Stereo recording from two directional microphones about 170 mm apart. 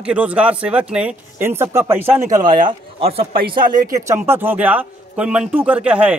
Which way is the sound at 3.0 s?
35° right (ahead or behind).